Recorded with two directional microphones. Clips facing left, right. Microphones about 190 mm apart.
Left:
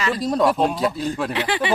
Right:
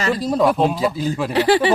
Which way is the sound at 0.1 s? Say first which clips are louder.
Right 2 dB; centre (ahead or behind).